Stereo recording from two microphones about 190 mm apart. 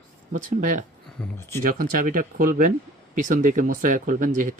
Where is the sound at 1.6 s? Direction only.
50° right (ahead or behind).